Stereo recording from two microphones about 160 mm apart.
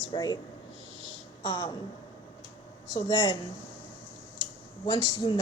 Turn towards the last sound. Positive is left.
turn(degrees=25)  # may be behind; listen again after turning